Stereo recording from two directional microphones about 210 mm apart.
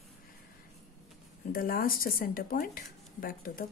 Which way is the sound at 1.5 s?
45° left (ahead or behind).